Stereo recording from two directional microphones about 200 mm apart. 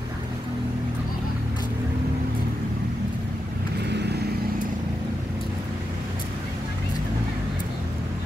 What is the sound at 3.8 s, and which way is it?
Vehicle, 55° right (ahead or behind).